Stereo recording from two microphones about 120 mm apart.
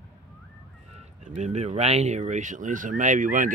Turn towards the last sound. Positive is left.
turn(degrees=-90)